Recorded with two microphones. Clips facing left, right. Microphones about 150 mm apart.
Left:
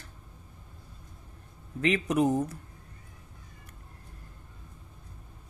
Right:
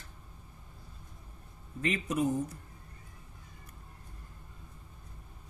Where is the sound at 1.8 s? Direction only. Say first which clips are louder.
Left 5 dB; 80° left.